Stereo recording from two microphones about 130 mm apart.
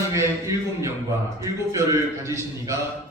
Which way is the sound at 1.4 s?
25° right (ahead or behind).